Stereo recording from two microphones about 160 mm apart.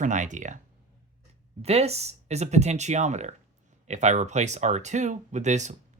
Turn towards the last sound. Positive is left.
turn(degrees=-45)  # may be behind; listen again after turning